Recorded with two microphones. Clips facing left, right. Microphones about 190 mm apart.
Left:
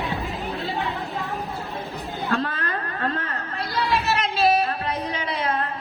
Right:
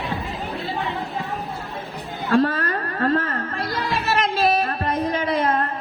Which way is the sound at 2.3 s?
45° right (ahead or behind).